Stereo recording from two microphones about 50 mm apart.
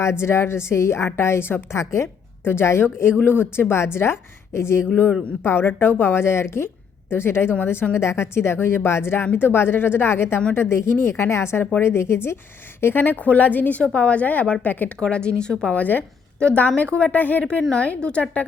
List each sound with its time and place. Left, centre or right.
0.0 s a woman's voice: left
1.7 s a woman's voice: left
2.4 s a woman's voice: left
5.4 s a woman's voice: left
7.9 s a woman's voice: left
12.8 s speech: left
13.1 s a woman's voice: left
14.9 s speech: centre
15.7 s a woman's voice: left
17.4 s a woman's voice: centre